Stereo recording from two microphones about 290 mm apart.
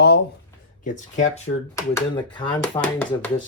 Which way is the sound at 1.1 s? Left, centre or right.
Left.